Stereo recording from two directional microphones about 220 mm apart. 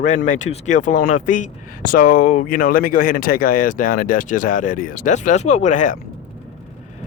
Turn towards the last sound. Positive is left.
turn(degrees=35)  # may be behind; listen again after turning